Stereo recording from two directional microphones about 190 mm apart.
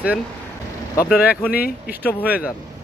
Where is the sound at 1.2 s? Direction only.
55° left (ahead or behind).